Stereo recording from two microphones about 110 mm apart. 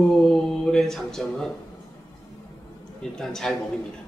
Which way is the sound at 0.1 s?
5° left (ahead or behind).